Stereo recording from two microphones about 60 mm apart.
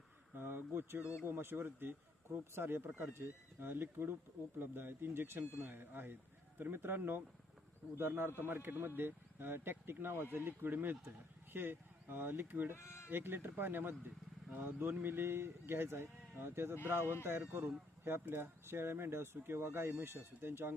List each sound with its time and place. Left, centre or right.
0.3 s speech: right
12.7 s speech: left
13.1 s speech: right